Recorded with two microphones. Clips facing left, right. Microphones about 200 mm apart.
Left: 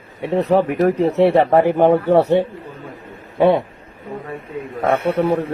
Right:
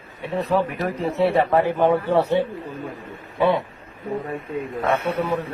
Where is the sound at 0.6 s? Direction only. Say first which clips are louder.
Left 8 dB; 65° left (ahead or behind).